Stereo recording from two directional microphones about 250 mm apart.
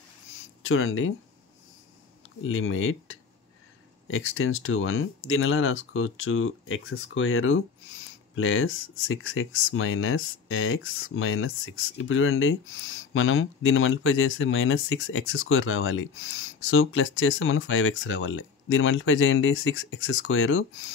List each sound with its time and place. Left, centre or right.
0.6 s speech: left
2.4 s speech: left